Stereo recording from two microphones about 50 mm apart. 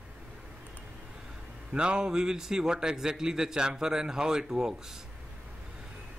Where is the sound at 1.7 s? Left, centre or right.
Centre.